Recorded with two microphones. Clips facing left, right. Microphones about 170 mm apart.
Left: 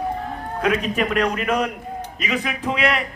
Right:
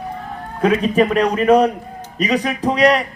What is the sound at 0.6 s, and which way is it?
A man's voice, 30° right (ahead or behind).